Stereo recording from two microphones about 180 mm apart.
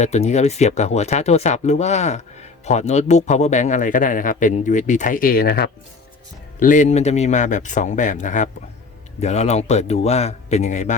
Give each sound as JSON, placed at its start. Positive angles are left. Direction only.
{"t": 0.0, "sound": "speech", "side_deg": 40}
{"t": 6.6, "sound": "a man's voice", "side_deg": 45}